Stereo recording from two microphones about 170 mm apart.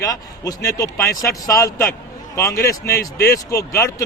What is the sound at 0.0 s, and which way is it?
A man's voice, 20° left (ahead or behind).